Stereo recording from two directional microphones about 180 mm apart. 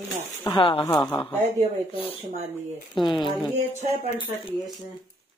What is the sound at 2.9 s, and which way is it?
Speech, 25° left (ahead or behind).